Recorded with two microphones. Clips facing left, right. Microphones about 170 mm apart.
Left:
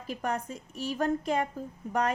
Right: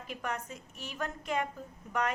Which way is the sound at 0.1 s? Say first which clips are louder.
Left 6 dB; 35° left (ahead or behind).